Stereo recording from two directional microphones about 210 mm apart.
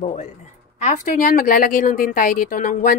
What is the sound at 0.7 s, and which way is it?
A woman's voice, 35° left (ahead or behind).